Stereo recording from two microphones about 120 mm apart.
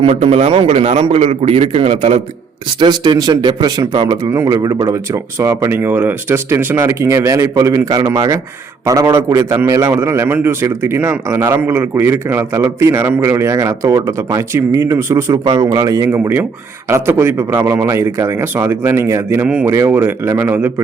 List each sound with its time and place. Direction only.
0.0 s a man's voice: 55° right (ahead or behind)
2.7 s a man's voice: 40° right (ahead or behind); by 20.7 s 15° right (ahead or behind)